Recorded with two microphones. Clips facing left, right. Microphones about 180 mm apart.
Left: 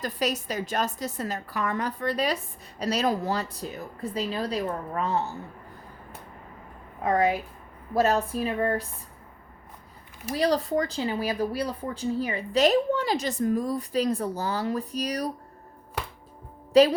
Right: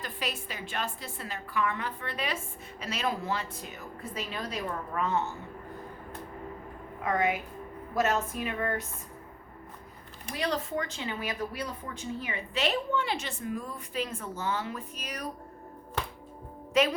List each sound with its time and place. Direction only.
0.0 s speech: 40° left (ahead or behind)
7.0 s speech: 35° left (ahead or behind)
10.3 s speech: 35° left (ahead or behind)
16.7 s speech: 35° left (ahead or behind)